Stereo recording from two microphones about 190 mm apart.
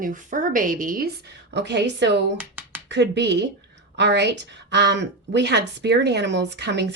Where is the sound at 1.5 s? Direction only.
65° right (ahead or behind).